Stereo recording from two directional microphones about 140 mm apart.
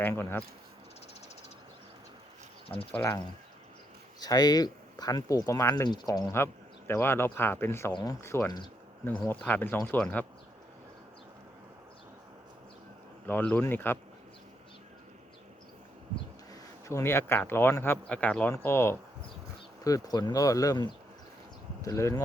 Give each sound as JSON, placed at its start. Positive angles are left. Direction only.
{"t": 0.0, "sound": "speech", "side_deg": 15}
{"t": 2.9, "sound": "speech", "side_deg": 20}
{"t": 13.2, "sound": "speech", "side_deg": 10}
{"t": 16.5, "sound": "speech", "side_deg": 20}